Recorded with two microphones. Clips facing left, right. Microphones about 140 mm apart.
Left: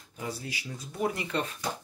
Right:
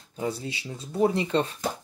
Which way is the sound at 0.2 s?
25° right (ahead or behind).